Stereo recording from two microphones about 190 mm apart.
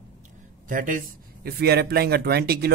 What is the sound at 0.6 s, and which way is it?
Speech, 45° right (ahead or behind).